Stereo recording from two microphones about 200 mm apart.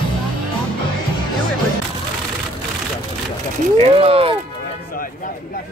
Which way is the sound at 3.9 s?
30° right (ahead or behind).